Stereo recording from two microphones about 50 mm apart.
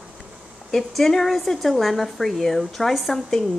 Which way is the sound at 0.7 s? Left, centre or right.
Centre.